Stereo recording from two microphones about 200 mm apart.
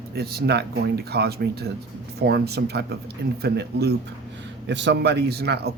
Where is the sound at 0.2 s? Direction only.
50° right (ahead or behind).